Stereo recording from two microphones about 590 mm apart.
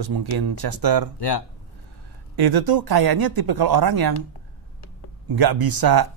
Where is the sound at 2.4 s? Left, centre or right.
Right.